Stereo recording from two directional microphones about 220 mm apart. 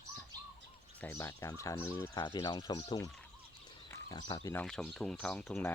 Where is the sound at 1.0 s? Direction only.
15° left (ahead or behind).